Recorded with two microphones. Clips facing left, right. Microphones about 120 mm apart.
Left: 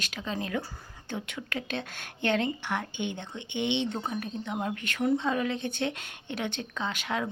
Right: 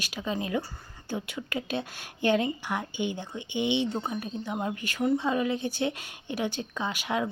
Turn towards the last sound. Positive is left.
turn(degrees=-10)  # may be behind; listen again after turning